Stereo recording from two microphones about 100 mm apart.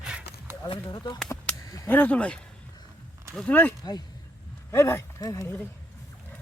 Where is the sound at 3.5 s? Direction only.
20° left (ahead or behind).